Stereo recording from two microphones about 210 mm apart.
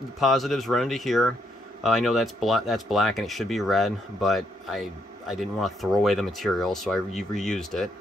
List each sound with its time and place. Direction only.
0.2 s speech: centre (ahead or behind)